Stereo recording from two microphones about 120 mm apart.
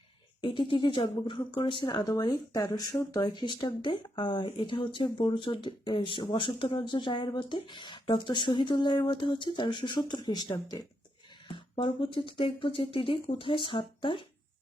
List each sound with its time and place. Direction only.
0.4 s speech: 45° left (ahead or behind)